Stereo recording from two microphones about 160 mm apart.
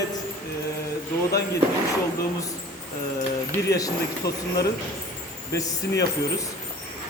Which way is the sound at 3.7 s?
20° left (ahead or behind).